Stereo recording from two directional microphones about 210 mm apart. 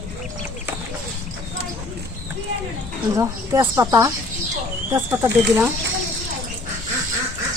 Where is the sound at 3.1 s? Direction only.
15° right (ahead or behind).